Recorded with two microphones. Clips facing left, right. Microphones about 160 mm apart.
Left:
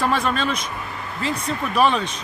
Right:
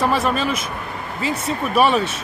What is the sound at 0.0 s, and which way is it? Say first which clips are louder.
Speech: right 2 dB; 5° right (ahead or behind).